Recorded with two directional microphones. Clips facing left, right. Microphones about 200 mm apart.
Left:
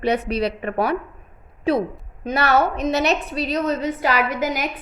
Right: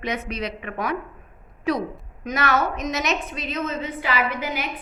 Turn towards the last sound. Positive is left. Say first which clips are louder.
# left 4 dB
turn(degrees=45)  # may be behind; listen again after turning